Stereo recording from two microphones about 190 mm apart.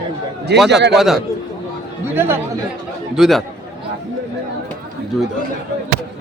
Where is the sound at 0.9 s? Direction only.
Centre (ahead or behind).